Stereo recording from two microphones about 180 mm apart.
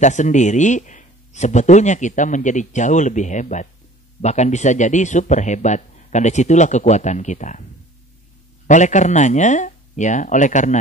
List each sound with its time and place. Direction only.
0.0 s speech: 40° left (ahead or behind)
8.6 s speech: 40° left (ahead or behind)